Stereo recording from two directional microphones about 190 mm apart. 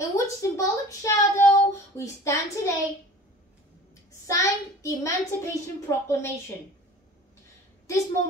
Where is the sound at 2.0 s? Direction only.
15° left (ahead or behind).